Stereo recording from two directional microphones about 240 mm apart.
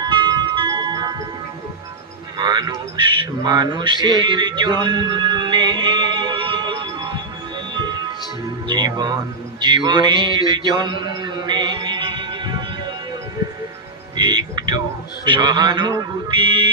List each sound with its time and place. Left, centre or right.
0.0 s music: centre
2.4 s music: centre
14.2 s music: centre
15.2 s a man's voice: centre